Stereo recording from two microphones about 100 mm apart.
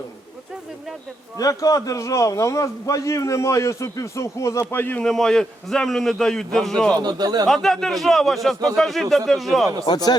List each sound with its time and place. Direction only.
1.4 s a man's voice: 35° left (ahead or behind); by 5.0 s 20° left (ahead or behind)
5.0 s a man's voice: 5° left (ahead or behind)
7.0 s a man's voice: 45° right (ahead or behind)
7.4 s a man's voice: 5° left (ahead or behind)